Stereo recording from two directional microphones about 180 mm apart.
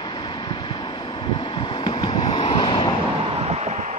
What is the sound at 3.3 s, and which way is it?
Vehicle, 35° right (ahead or behind).